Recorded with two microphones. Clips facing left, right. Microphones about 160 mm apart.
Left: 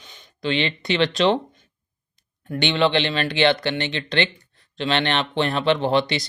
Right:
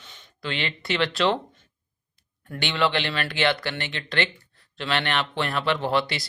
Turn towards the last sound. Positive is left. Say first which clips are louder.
# left 4 dB
turn(degrees=20)  # may be behind; listen again after turning